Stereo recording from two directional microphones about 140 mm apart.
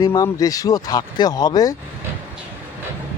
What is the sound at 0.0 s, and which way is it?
Speech, 25° left (ahead or behind).